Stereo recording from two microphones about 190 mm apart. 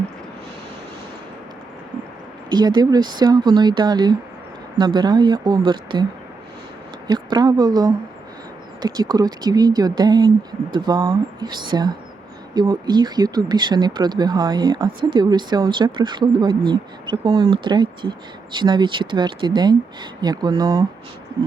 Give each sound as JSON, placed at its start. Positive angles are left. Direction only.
{"t": 2.5, "sound": "speech", "side_deg": -20}
{"t": 7.1, "sound": "speech", "side_deg": -20}